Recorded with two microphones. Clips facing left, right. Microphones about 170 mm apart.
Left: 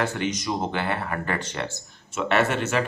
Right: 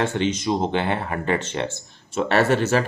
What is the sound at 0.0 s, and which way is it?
Speech, 25° right (ahead or behind).